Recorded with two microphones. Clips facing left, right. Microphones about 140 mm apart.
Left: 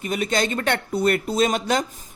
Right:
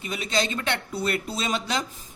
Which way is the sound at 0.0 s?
50° left (ahead or behind).